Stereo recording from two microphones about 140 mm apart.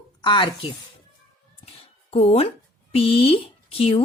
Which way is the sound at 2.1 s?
45° left (ahead or behind).